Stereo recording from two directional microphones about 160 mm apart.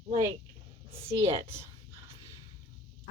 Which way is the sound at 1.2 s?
35° right (ahead or behind).